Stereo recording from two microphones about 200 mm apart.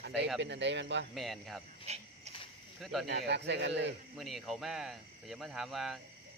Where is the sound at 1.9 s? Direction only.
30° right (ahead or behind).